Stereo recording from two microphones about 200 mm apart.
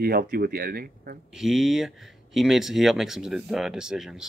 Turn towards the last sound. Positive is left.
turn(degrees=0)  # may be behind; listen again after turning